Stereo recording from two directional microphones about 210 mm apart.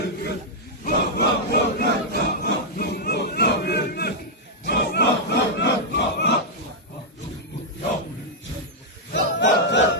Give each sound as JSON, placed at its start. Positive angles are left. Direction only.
{"t": 0.9, "sound": "crowd", "side_deg": 50}
{"t": 9.1, "sound": "battle cry", "side_deg": 60}